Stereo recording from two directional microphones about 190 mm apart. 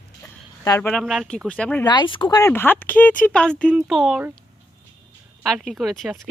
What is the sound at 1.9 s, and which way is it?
Speech, 25° left (ahead or behind).